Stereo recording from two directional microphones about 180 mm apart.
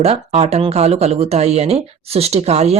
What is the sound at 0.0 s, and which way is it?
Speech, 35° right (ahead or behind).